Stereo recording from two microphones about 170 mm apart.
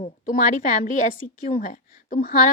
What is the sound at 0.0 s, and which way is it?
Speech, 50° left (ahead or behind).